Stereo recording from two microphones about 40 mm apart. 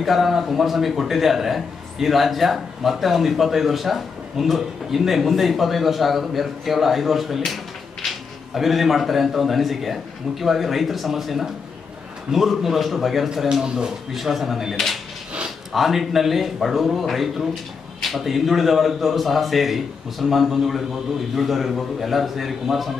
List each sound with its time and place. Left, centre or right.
0.0 s a man's voice: centre
13.3 s speech: centre
14.1 s a man's voice: centre